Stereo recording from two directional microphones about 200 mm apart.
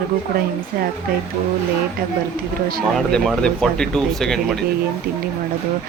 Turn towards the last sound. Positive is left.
turn(degrees=0)  # may be behind; listen again after turning